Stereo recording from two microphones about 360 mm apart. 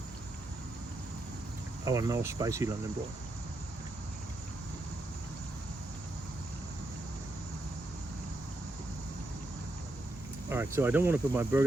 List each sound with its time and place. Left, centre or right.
1.8 s speech: centre
10.5 s speech: centre